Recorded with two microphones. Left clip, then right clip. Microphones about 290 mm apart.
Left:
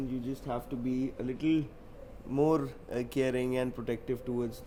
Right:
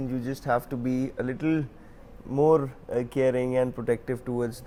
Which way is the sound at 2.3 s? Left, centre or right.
Right.